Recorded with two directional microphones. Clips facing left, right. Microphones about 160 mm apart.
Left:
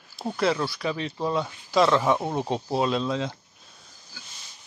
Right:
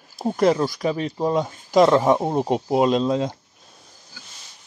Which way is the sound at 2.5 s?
15° right (ahead or behind).